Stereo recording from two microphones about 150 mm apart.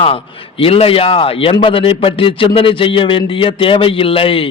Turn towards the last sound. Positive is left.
turn(degrees=35)  # may be behind; listen again after turning